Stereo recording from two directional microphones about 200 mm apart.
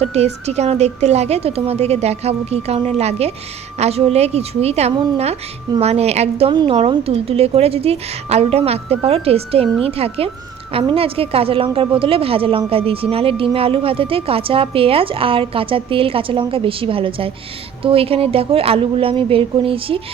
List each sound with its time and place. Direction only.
0.0 s a woman's voice: 30° right (ahead or behind)